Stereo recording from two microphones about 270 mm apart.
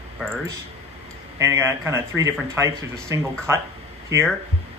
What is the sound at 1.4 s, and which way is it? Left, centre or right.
Speech, centre.